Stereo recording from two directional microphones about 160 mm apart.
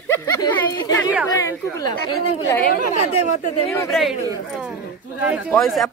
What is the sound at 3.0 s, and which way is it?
Speech, 40° left (ahead or behind).